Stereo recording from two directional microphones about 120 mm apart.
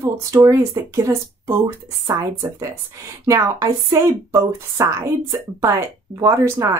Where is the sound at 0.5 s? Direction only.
25° right (ahead or behind).